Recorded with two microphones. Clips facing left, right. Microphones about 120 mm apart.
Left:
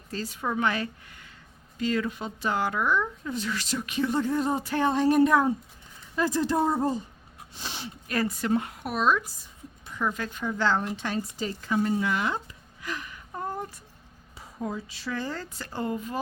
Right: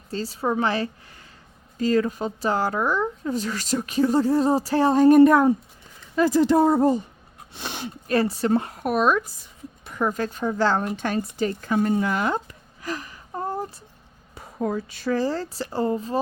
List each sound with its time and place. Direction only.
0.1 s speech: 30° right (ahead or behind)
5.0 s speech: 50° right (ahead or behind)
6.1 s a woman's voice: 75° right (ahead or behind)
7.5 s a sound: 60° right (ahead or behind)
8.0 s speech: 30° right (ahead or behind); by 10.0 s 65° right (ahead or behind)
10.0 s speech: 40° right (ahead or behind)
10.8 s speech: 55° right (ahead or behind); by 13.7 s 30° right (ahead or behind)
14.3 s speech: 55° right (ahead or behind)
15.1 s speech: 35° right (ahead or behind)